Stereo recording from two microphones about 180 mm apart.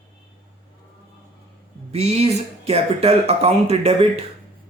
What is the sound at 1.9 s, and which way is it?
Speech, 35° right (ahead or behind).